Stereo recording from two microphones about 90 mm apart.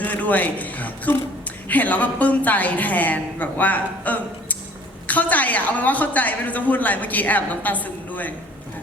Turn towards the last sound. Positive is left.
turn(degrees=20)  # may be behind; listen again after turning